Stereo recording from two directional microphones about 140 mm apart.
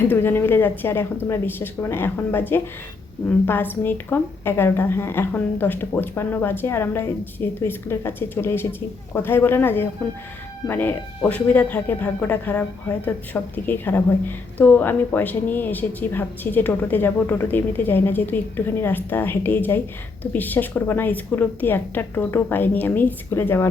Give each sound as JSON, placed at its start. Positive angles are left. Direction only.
{"t": 0.1, "sound": "speech", "side_deg": 15}